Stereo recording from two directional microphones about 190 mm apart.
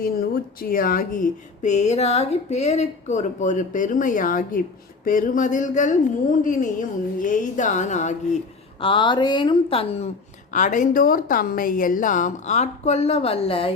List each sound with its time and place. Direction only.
0.0 s a woman's voice: 50° left (ahead or behind)
8.8 s a woman's voice: 25° left (ahead or behind)
10.5 s a woman's voice: 40° left (ahead or behind)